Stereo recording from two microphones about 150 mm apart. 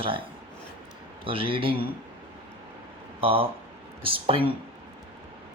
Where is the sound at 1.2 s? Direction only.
35° right (ahead or behind).